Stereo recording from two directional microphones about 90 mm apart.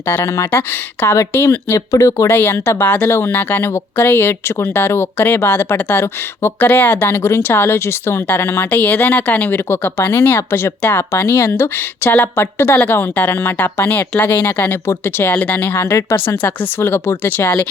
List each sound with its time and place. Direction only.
0.1 s a woman's voice: 30° left (ahead or behind)
2.4 s a woman's voice: 25° left (ahead or behind)